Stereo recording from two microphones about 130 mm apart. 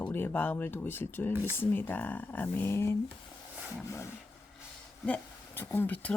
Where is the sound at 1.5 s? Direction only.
15° left (ahead or behind).